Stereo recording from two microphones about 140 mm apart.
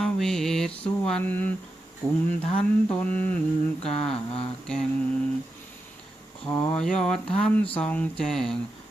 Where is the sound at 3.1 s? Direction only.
10° left (ahead or behind).